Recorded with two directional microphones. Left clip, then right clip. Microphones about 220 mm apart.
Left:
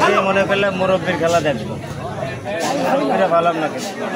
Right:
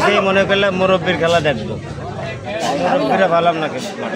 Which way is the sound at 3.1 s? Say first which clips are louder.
Right 2 dB; 40° right (ahead or behind).